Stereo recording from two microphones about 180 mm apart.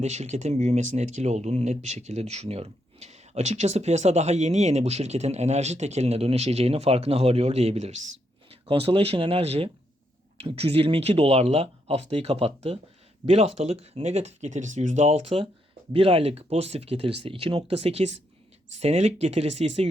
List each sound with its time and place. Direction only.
0.0 s speech: 40° right (ahead or behind)